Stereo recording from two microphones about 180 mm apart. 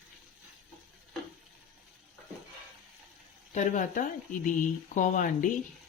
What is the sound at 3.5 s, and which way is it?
Speech, 45° left (ahead or behind).